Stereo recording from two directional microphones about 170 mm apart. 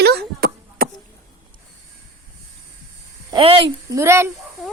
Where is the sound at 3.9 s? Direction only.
15° right (ahead or behind).